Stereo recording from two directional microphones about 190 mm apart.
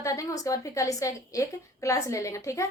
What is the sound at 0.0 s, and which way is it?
A woman's voice, 15° left (ahead or behind).